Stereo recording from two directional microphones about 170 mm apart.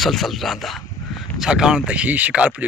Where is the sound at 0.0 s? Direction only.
Centre (ahead or behind).